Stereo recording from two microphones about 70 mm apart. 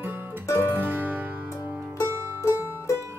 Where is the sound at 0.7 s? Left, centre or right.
Right.